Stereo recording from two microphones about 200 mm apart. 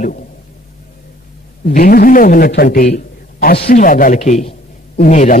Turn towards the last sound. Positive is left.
turn(degrees=40)  # may be behind; listen again after turning